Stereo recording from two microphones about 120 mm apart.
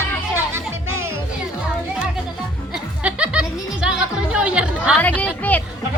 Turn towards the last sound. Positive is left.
turn(degrees=10)  # may be behind; listen again after turning